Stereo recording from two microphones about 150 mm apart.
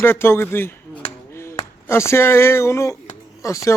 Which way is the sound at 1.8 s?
20° left (ahead or behind).